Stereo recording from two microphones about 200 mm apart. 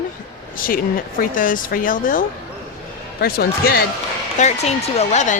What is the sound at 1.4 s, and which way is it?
Speech, 45° left (ahead or behind).